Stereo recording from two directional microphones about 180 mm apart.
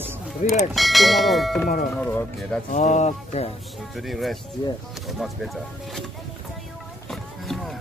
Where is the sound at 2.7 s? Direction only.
40° left (ahead or behind).